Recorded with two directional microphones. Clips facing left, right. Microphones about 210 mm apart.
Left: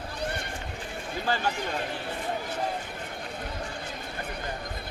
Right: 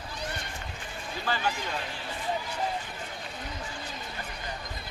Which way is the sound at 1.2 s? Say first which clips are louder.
Left 2 dB; 45° left (ahead or behind).